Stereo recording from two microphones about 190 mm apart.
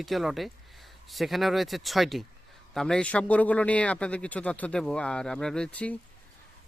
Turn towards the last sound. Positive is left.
turn(degrees=5)  # may be behind; listen again after turning